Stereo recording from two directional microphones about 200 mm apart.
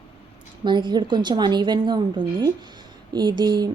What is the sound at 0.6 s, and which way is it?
A woman's voice, 20° right (ahead or behind).